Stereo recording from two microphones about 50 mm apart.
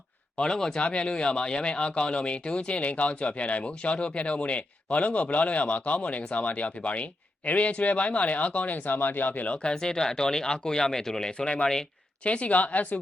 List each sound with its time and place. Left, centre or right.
0.3 s speech: centre
0.8 s speech: left
9.6 s speech: centre
12.2 s speech: left